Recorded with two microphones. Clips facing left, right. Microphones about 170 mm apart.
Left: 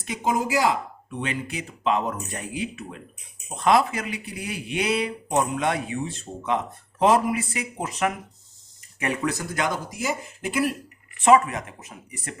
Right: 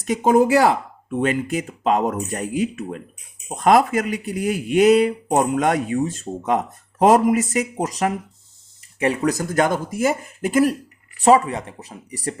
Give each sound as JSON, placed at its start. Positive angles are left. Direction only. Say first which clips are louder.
{"t": 0.0, "sound": "speech", "louder": "right 9 dB", "side_deg": -45}
{"t": 11.2, "sound": "speech", "louder": "right 3 dB", "side_deg": -35}